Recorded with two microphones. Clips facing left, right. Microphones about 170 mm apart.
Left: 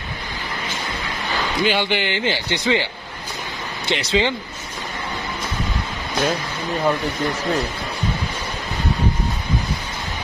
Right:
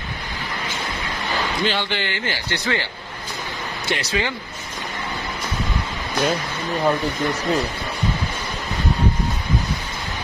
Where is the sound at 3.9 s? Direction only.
20° left (ahead or behind).